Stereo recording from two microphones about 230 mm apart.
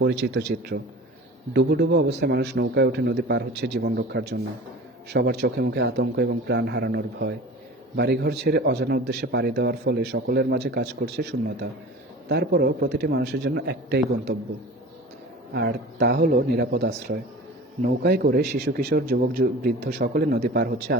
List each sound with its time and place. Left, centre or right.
0.0 s a man's voice: right
15.5 s a man's voice: right